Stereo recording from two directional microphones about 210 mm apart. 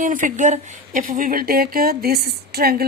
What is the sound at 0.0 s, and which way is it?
A woman's voice, 40° right (ahead or behind).